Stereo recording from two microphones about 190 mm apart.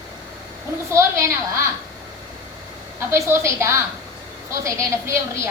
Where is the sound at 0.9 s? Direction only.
15° right (ahead or behind).